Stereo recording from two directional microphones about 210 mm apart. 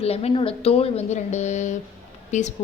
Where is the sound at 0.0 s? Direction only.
30° left (ahead or behind).